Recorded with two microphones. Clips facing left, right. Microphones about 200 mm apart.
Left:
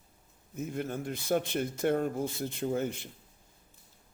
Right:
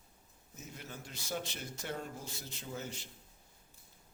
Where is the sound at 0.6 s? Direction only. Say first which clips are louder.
Left 14 dB; 55° left (ahead or behind).